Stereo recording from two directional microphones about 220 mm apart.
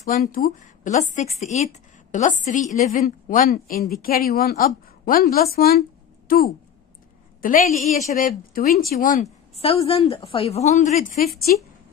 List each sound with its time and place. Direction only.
0.6 s a woman's voice: 35° left (ahead or behind)
5.6 s a sound: 40° left (ahead or behind)
7.4 s a woman's voice: 35° left (ahead or behind)